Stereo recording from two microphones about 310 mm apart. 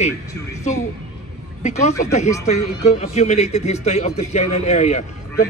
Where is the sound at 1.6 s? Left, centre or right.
Left.